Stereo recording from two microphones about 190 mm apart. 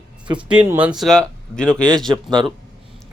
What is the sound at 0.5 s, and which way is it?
Speech, 10° right (ahead or behind).